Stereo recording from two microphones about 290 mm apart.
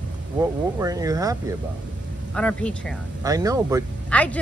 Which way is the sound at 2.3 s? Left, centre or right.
Centre.